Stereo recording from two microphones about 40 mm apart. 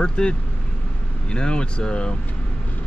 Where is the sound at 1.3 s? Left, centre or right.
Left.